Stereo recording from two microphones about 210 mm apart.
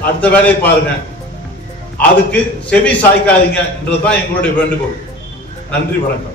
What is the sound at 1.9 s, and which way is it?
A man's voice, 5° left (ahead or behind).